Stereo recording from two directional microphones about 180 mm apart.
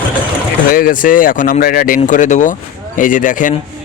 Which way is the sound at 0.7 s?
50° left (ahead or behind).